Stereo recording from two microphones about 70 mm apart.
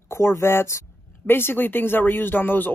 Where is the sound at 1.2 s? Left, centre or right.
Left.